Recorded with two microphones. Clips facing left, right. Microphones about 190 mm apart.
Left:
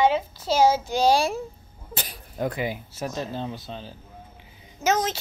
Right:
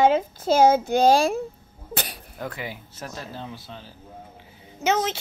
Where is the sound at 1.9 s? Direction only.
70° right (ahead or behind).